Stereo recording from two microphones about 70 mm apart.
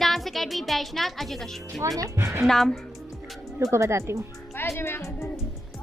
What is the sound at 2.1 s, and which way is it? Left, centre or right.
Speech, right.